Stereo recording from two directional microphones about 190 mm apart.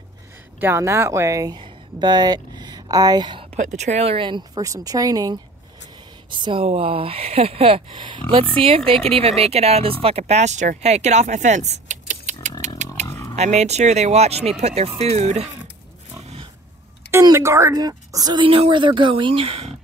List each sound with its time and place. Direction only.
0.6 s speech: 10° right (ahead or behind)
3.5 s a woman's voice: 40° right (ahead or behind)
12.6 s a sound: 40° right (ahead or behind)
13.0 s a sound: 15° left (ahead or behind)
13.4 s speech: 35° right (ahead or behind)
17.1 s a woman's voice: 15° right (ahead or behind); by 19.7 s 30° right (ahead or behind)